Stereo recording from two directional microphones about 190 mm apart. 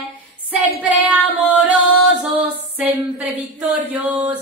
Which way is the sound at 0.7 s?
10° right (ahead or behind).